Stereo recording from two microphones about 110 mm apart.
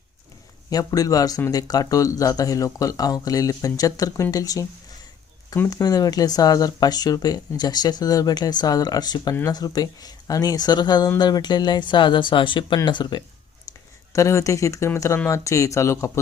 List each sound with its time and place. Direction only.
0.7 s speech: 35° left (ahead or behind)
5.6 s speech: 35° left (ahead or behind)
14.1 s speech: 30° left (ahead or behind)